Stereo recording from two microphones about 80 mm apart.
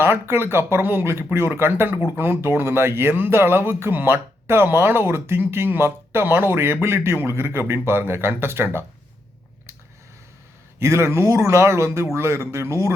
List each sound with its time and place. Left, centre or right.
0.0 s speech: right
10.8 s speech: right